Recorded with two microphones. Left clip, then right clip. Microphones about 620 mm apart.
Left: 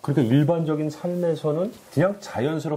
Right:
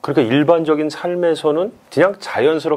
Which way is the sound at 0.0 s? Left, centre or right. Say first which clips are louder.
Right 7 dB; right.